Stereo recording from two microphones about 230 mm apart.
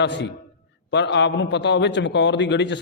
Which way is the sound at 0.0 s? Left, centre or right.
Left.